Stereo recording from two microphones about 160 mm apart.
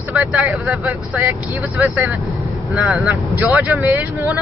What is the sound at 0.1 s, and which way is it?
Speech, 10° right (ahead or behind).